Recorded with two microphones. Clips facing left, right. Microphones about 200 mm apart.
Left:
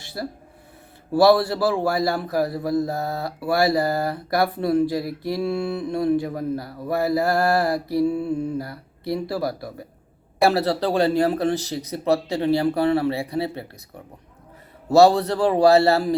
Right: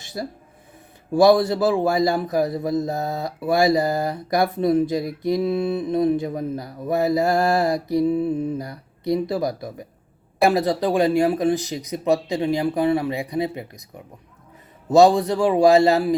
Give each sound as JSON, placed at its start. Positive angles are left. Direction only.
{"t": 0.0, "sound": "a sound", "side_deg": -15}
{"t": 1.1, "sound": "a man's voice", "side_deg": -15}
{"t": 14.8, "sound": "speech", "side_deg": -15}